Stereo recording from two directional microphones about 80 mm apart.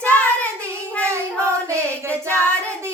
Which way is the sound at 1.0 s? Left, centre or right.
Right.